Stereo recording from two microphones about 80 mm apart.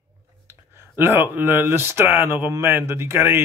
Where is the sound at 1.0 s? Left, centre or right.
Right.